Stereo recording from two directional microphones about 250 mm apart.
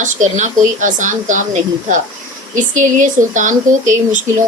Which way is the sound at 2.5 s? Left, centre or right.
Right.